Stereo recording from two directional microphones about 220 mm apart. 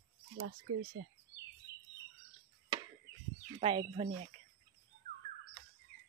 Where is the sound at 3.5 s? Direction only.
25° right (ahead or behind).